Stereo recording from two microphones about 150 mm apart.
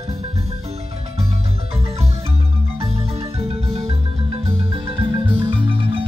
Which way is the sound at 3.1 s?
40° right (ahead or behind).